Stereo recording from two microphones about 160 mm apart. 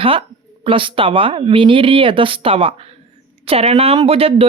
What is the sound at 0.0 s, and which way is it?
Speech, 35° right (ahead or behind).